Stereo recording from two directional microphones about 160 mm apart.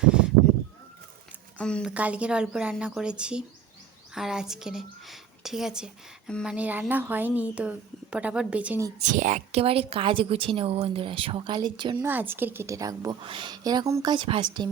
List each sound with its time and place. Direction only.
0.0 s a sound: 5° right (ahead or behind)
1.5 s speech: 5° left (ahead or behind)
1.9 s a woman's voice: 10° right (ahead or behind)
9.0 s a woman's voice: 50° right (ahead or behind); by 12.0 s 30° right (ahead or behind)
12.0 s a woman's voice: 10° right (ahead or behind); by 14.7 s 30° right (ahead or behind)